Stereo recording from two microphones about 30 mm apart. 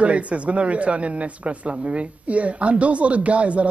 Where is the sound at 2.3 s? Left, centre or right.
Right.